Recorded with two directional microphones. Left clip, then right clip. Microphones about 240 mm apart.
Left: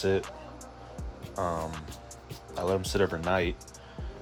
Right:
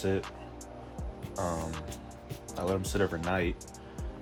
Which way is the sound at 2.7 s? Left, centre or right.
Left.